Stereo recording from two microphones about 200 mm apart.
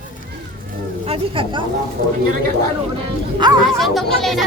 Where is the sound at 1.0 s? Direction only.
25° right (ahead or behind).